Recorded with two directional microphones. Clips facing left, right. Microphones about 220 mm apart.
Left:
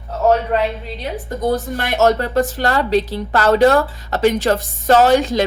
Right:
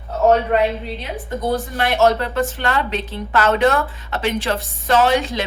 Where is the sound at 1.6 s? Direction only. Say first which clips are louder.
Right 2 dB; 45° left (ahead or behind).